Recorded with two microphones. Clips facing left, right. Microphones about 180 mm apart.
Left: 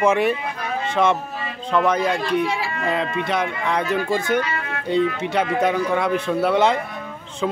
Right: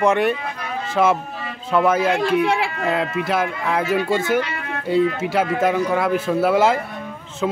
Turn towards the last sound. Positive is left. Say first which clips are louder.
# right 1 dB
turn(degrees=-5)  # may be behind; listen again after turning